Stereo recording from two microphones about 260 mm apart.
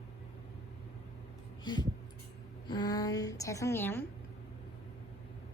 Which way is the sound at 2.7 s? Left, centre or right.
Centre.